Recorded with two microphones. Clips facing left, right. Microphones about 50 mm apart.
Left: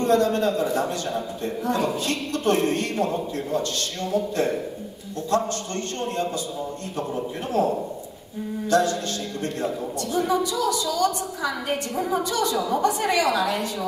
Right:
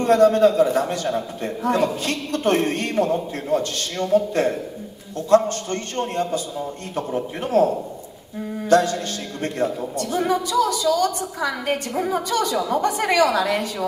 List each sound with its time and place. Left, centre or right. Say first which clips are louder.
0.0 s a woman's voice: right 6 dB; right
4.1 s speech: right 6 dB; right
5.3 s a woman's voice: right 7 dB; right
8.6 s a woman's voice: right 4 dB; right